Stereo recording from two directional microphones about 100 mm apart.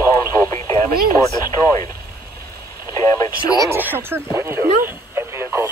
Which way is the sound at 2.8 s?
35° left (ahead or behind).